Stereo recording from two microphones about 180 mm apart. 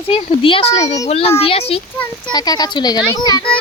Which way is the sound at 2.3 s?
20° left (ahead or behind).